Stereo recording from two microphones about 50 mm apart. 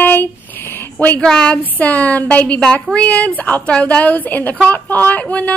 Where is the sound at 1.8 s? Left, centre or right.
Left.